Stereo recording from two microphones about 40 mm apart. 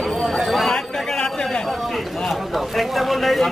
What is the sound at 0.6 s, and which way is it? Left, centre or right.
Speech, centre.